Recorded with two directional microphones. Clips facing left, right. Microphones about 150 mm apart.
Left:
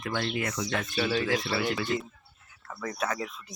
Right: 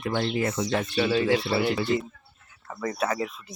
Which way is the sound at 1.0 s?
10° right (ahead or behind).